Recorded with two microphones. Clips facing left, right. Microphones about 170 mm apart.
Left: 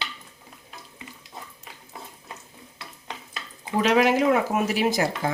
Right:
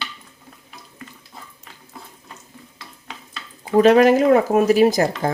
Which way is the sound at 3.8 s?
45° right (ahead or behind).